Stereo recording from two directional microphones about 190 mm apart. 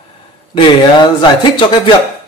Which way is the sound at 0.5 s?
25° left (ahead or behind).